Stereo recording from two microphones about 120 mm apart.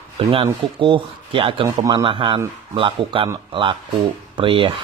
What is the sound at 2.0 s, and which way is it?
Speech, 45° right (ahead or behind).